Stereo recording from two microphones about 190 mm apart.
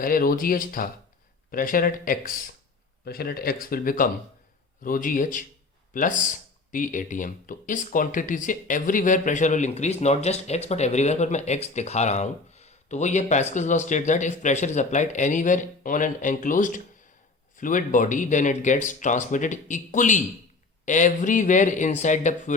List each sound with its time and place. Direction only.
0.0 s speech: 50° left (ahead or behind)